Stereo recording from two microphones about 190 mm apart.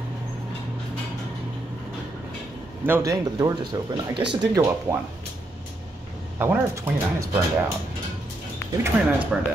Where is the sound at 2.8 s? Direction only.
15° right (ahead or behind).